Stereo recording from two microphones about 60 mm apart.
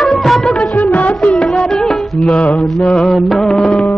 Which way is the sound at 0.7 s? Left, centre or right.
Left.